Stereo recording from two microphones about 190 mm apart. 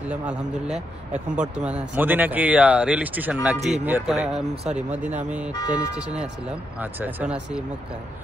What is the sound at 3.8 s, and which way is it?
A man's voice, 10° right (ahead or behind).